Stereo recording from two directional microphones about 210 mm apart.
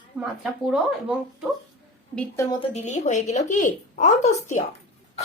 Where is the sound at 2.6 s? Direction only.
35° left (ahead or behind).